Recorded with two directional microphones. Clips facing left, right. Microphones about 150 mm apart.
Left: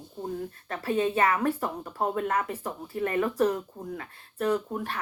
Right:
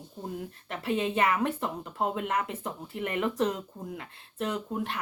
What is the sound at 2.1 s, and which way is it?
Speech, 20° right (ahead or behind).